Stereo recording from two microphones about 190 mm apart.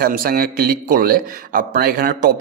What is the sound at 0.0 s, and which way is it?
Speech, 50° right (ahead or behind).